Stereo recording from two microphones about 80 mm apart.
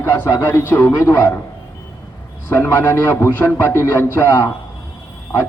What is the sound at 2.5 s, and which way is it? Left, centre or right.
A man's voice, left.